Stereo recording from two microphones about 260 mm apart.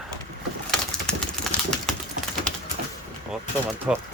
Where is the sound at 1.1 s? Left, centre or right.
Centre.